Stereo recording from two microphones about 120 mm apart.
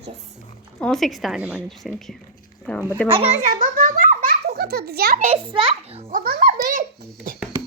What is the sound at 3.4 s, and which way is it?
Speech, 90° right.